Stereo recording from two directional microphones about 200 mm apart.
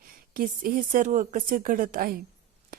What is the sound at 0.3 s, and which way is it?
Speech, 45° right (ahead or behind).